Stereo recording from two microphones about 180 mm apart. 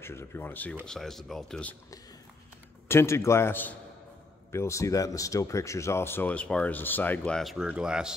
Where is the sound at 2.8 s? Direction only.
15° left (ahead or behind).